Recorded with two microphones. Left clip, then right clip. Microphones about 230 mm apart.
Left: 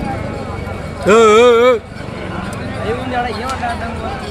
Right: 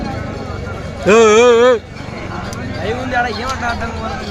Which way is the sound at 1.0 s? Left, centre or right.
Centre.